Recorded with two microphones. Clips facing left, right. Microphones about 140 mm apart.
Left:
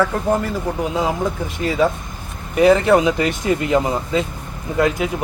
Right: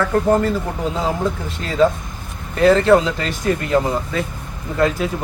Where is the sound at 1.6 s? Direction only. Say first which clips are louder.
Right 2 dB; 10° left (ahead or behind).